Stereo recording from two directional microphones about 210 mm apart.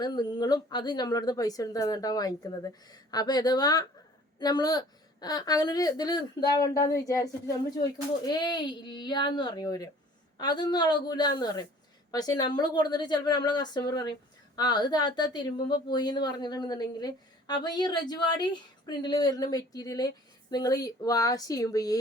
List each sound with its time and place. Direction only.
0.0 s a woman's voice: 20° left (ahead or behind)